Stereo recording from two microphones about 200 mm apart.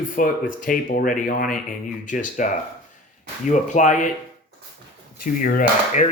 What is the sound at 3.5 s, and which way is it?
Speech, 40° left (ahead or behind).